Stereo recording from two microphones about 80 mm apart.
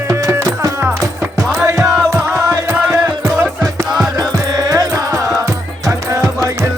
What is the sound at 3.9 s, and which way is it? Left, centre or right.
Music, centre.